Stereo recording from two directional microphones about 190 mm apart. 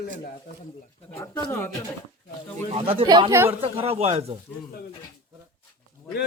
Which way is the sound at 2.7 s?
30° right (ahead or behind).